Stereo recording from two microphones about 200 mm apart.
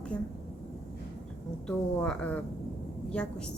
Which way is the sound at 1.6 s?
5° left (ahead or behind).